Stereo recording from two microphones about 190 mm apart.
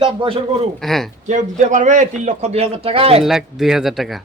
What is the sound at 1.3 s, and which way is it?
A man's voice, 40° right (ahead or behind).